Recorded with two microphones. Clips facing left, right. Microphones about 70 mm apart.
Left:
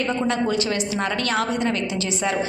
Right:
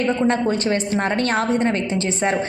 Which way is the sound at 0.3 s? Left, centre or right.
Right.